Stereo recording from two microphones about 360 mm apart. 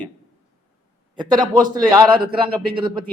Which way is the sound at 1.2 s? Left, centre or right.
Centre.